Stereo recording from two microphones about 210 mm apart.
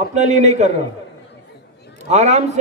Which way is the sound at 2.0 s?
35° right (ahead or behind).